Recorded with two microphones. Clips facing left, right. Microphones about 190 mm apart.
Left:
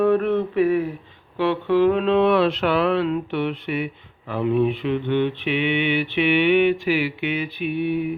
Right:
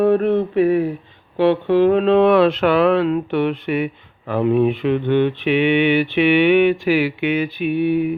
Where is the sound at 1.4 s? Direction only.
30° right (ahead or behind).